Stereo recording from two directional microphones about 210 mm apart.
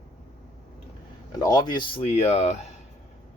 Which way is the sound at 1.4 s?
20° left (ahead or behind).